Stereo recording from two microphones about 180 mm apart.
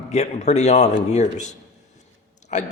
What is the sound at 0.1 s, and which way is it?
A man's voice, 40° left (ahead or behind).